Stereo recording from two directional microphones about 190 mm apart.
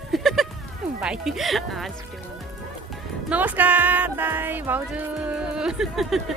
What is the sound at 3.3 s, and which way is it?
Music, 10° right (ahead or behind).